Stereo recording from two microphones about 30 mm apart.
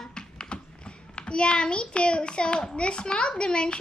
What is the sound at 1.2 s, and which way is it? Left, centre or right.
A child's voice, left.